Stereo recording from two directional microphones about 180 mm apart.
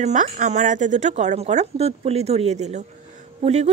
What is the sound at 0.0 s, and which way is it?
Speech, 45° right (ahead or behind).